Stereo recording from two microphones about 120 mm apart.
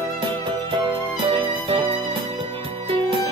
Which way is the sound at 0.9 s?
45° right (ahead or behind).